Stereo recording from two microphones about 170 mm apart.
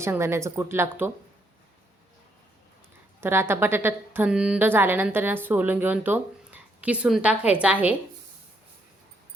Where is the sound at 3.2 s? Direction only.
15° right (ahead or behind).